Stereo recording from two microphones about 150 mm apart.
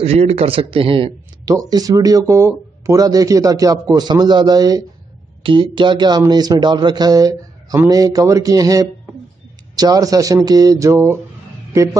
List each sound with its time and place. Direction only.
0.0 s a man's voice: 45° right (ahead or behind)
1.4 s speech: 25° right (ahead or behind)